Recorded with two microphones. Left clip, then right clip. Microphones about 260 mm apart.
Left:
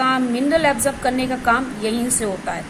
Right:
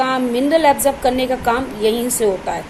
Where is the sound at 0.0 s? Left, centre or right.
Centre.